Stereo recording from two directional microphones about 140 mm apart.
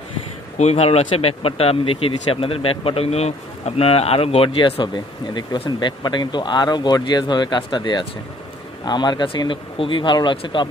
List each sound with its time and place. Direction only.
0.6 s speech: 50° left (ahead or behind); by 10.7 s 35° left (ahead or behind)